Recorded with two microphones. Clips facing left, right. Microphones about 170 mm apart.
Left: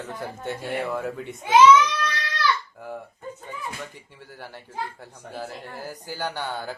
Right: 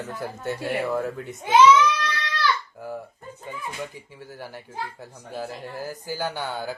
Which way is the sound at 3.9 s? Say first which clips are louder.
Right 4 dB; 10° right (ahead or behind).